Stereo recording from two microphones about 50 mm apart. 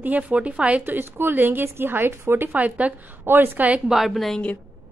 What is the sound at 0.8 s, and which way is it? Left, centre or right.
A woman's voice, right.